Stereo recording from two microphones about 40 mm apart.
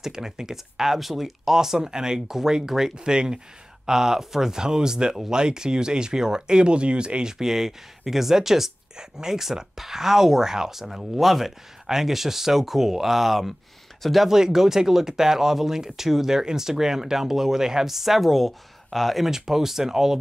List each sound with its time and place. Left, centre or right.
0.0 s speech: centre